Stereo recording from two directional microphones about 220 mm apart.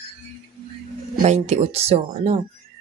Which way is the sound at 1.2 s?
30° right (ahead or behind).